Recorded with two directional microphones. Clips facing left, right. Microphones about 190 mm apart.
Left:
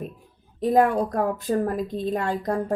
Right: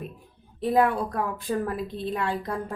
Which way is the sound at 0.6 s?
45° left (ahead or behind).